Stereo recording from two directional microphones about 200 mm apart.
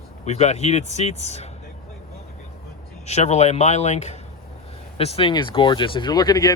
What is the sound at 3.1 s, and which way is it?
Speech, 35° left (ahead or behind).